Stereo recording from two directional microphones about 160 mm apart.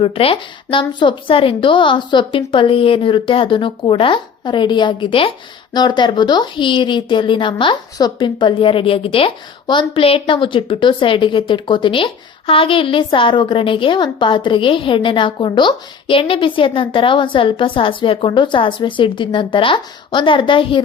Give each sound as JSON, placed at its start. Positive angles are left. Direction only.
{"t": 0.0, "sound": "a woman's voice", "side_deg": 35}